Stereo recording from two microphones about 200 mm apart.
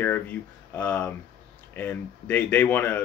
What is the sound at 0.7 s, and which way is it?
Speech, 10° left (ahead or behind).